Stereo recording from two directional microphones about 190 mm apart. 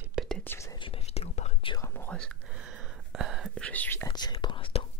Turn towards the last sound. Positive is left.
turn(degrees=25)  # may be behind; listen again after turning